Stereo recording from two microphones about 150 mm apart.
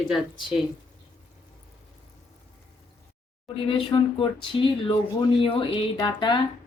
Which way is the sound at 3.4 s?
35° left (ahead or behind).